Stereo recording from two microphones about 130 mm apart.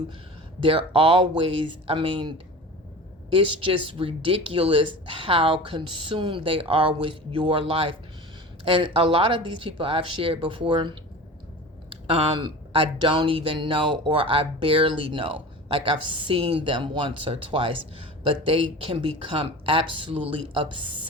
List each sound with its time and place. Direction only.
0.6 s speech: 45° right (ahead or behind)
3.3 s speech: 45° right (ahead or behind)
12.0 s speech: 40° right (ahead or behind)